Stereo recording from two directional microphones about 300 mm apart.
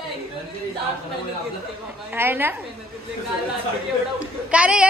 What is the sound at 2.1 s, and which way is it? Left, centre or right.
Speech, centre.